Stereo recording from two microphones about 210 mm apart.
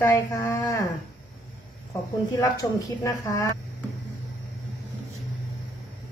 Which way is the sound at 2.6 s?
15° left (ahead or behind).